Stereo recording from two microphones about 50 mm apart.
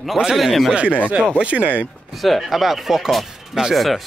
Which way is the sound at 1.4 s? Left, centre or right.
Right.